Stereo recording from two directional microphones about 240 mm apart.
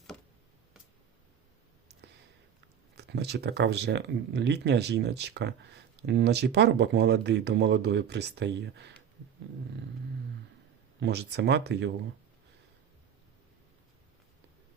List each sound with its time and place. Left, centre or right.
3.0 s speech: right
11.0 s speech: right